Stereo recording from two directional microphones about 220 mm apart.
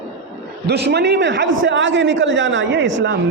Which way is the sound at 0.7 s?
50° right (ahead or behind).